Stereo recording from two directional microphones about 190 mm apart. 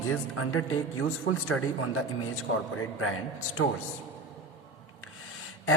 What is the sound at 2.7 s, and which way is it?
Speech, 90° left.